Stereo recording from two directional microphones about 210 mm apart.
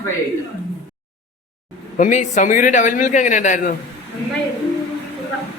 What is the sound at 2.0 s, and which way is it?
A man's voice, 35° left (ahead or behind).